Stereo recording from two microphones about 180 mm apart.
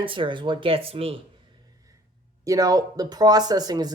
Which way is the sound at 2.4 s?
20° right (ahead or behind).